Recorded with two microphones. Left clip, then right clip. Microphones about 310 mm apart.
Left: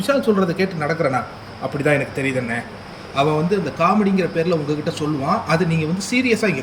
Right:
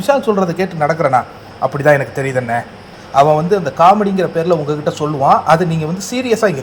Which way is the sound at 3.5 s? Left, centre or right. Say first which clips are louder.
Right 8 dB; centre.